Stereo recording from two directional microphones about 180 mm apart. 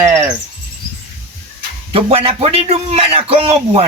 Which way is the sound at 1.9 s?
35° right (ahead or behind).